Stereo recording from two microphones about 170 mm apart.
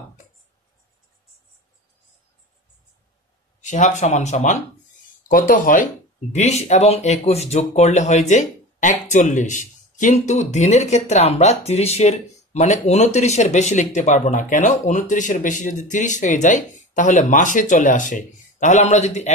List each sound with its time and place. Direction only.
3.6 s speech: 45° left (ahead or behind)
5.3 s speech: 55° left (ahead or behind)
6.3 s speech: 40° left (ahead or behind)